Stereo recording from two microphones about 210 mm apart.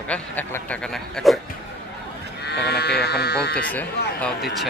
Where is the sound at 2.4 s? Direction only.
50° left (ahead or behind).